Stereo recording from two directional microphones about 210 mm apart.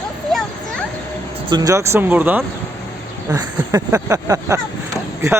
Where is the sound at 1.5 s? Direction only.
15° right (ahead or behind).